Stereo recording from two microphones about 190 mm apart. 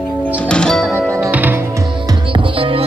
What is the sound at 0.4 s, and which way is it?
Music, 5° left (ahead or behind).